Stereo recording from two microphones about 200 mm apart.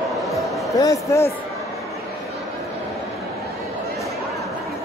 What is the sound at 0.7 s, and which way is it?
Speech, 15° left (ahead or behind).